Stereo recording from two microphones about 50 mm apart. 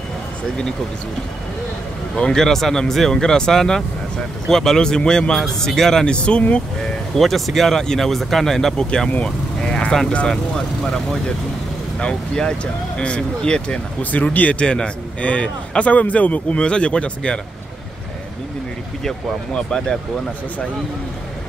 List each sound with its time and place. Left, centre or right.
2.1 s speech: centre
6.0 s a man's voice: left
7.2 s speech: centre
9.2 s vehicle: centre
10.2 s speech: centre
14.1 s a man's voice: left
19.0 s speech: centre